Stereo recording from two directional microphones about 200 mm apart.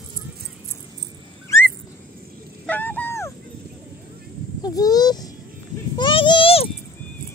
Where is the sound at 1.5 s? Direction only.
15° left (ahead or behind).